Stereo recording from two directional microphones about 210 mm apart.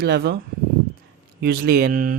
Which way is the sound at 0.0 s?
50° right (ahead or behind).